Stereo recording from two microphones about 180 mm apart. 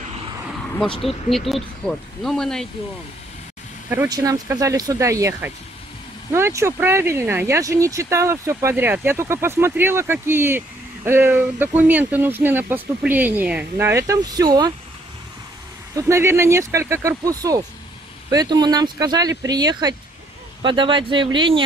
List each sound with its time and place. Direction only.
1.0 s speech: centre (ahead or behind)
4.1 s speech: 20° right (ahead or behind)
15.9 s speech: 15° right (ahead or behind)